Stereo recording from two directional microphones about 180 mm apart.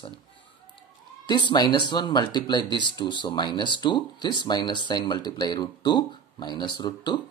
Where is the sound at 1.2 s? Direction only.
25° left (ahead or behind).